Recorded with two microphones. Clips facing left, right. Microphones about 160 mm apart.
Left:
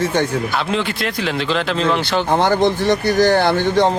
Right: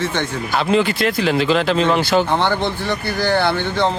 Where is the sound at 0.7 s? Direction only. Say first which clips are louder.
Right 4 dB; centre (ahead or behind).